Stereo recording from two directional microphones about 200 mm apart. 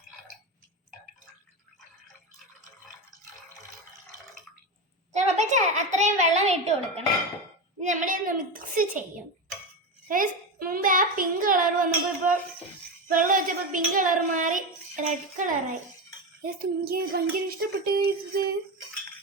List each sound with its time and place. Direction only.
5.1 s music: 35° right (ahead or behind)
7.8 s a child's voice: 40° right (ahead or behind)
10.1 s a child's voice: 45° right (ahead or behind)
16.6 s a child's voice: 50° right (ahead or behind)